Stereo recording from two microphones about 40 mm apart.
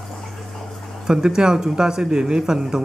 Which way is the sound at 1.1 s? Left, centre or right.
Centre.